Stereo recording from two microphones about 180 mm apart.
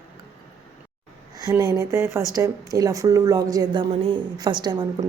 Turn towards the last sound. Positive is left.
turn(degrees=-25)  # may be behind; listen again after turning